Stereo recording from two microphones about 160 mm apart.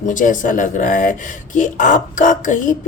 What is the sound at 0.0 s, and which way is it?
Speech, 55° left (ahead or behind).